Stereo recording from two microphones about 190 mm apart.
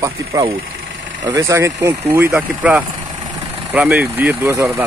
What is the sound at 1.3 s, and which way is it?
Speech, 15° right (ahead or behind).